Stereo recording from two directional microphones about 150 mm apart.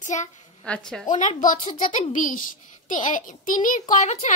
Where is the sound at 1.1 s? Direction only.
55° left (ahead or behind).